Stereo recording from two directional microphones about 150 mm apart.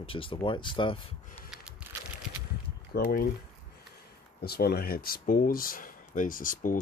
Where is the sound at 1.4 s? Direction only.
5° right (ahead or behind).